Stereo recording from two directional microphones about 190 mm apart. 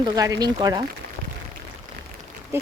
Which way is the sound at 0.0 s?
20° right (ahead or behind).